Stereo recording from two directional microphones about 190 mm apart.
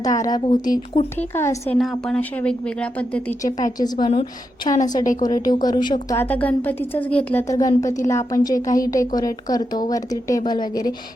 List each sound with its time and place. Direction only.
0.0 s a woman's voice: 20° left (ahead or behind)
1.8 s a woman's voice: centre (ahead or behind)
3.4 s a woman's voice: 20° left (ahead or behind)
6.1 s a woman's voice: 10° left (ahead or behind)